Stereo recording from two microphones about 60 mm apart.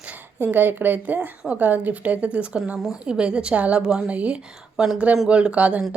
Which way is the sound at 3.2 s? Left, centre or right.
Centre.